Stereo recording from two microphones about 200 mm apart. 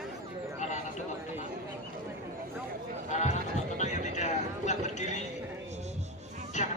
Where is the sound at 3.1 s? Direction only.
35° left (ahead or behind).